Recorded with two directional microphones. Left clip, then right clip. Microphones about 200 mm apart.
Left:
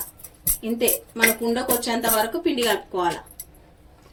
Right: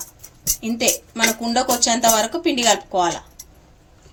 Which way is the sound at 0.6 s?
50° right (ahead or behind).